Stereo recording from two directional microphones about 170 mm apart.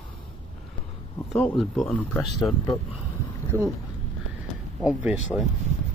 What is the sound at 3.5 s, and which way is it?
Speech, 15° right (ahead or behind).